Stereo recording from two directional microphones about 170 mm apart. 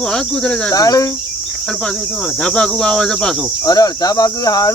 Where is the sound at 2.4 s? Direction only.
5° left (ahead or behind).